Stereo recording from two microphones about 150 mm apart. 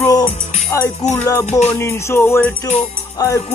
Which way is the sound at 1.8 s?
15° left (ahead or behind).